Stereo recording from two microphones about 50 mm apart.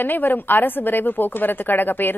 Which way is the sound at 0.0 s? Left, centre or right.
Left.